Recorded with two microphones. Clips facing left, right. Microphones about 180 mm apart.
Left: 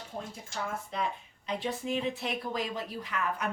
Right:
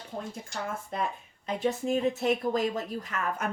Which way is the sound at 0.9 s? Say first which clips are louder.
Right 1 dB; 50° right (ahead or behind).